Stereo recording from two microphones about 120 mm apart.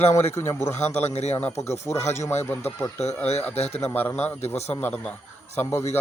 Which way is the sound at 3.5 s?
60° left (ahead or behind).